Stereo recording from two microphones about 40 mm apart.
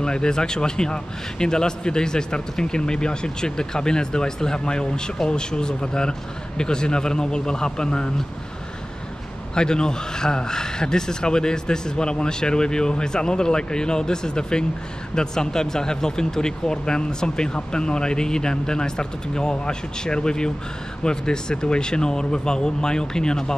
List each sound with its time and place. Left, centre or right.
0.0 s a man's voice: centre
9.6 s a man's voice: centre